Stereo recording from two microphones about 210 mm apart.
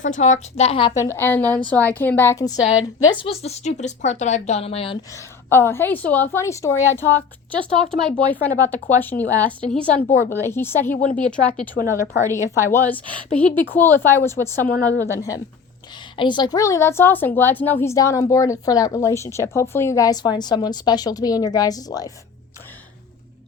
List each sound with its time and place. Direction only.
0.0 s speech: 35° left (ahead or behind)
5.1 s speech: 10° left (ahead or behind)